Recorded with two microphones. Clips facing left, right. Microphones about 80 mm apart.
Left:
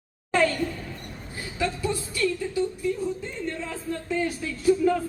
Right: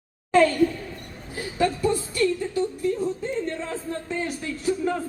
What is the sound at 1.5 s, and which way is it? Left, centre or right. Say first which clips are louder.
Speech: right 5 dB; right.